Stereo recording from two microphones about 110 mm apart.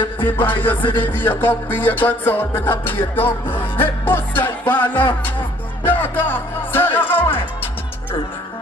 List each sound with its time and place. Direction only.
0.2 s music: 15° left (ahead or behind)